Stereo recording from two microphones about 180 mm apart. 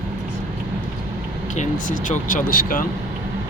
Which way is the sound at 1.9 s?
45° left (ahead or behind).